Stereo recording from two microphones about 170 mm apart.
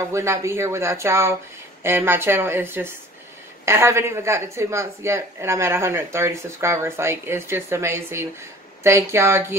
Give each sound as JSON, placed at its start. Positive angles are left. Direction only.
{"t": 0.1, "sound": "speech", "side_deg": -15}